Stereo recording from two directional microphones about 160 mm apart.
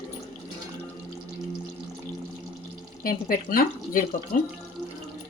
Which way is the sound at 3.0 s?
65° left (ahead or behind).